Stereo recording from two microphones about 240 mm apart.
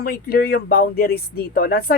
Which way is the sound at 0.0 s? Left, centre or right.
Left.